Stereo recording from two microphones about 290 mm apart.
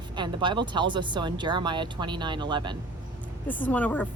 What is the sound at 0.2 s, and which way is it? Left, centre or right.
Speech, centre.